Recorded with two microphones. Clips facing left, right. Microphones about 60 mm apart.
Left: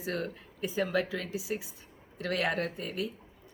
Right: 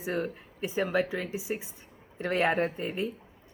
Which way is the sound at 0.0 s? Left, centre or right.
Centre.